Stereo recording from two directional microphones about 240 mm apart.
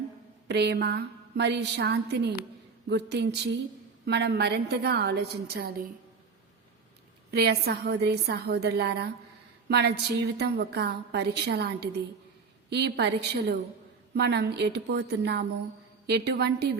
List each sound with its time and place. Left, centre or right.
0.4 s a woman's voice: right
7.3 s a woman's voice: right
12.7 s a woman's voice: right